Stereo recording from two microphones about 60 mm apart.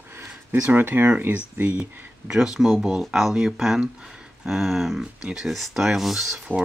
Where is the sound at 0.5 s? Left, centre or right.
Right.